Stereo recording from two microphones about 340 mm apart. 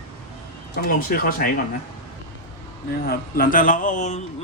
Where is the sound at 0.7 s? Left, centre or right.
Left.